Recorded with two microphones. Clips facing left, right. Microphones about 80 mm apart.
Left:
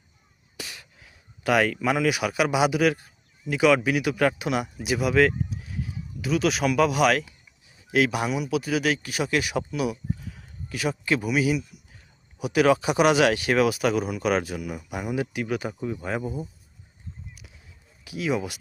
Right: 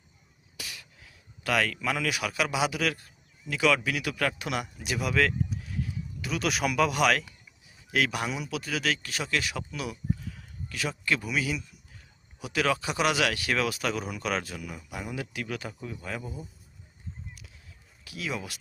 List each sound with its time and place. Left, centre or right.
0.5 s speech: left
18.0 s speech: centre